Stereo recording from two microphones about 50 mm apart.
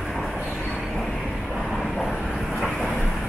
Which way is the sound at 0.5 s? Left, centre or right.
Centre.